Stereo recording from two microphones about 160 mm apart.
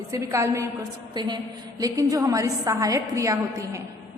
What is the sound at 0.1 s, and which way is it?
A woman's voice, 20° right (ahead or behind).